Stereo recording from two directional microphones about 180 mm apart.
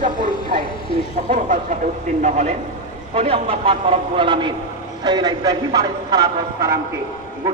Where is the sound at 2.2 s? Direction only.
40° right (ahead or behind); by 6.2 s 20° right (ahead or behind).